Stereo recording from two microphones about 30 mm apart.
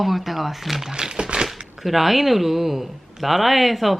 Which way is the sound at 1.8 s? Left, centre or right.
Centre.